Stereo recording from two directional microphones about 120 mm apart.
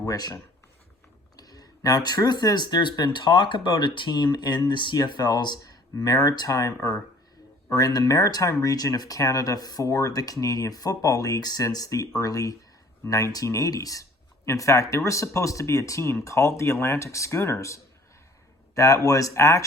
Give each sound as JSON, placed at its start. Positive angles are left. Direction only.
{"t": 0.0, "sound": "speech", "side_deg": 30}
{"t": 1.4, "sound": "speech", "side_deg": 30}